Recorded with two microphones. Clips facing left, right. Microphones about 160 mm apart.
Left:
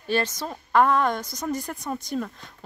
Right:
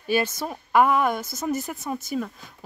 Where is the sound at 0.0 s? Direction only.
10° right (ahead or behind).